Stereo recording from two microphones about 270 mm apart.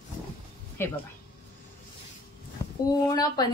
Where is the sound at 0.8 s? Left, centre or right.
Centre.